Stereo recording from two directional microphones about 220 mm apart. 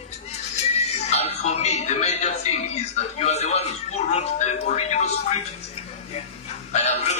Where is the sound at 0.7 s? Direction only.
30° left (ahead or behind).